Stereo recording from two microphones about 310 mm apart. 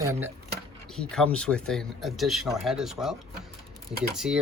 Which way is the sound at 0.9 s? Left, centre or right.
Centre.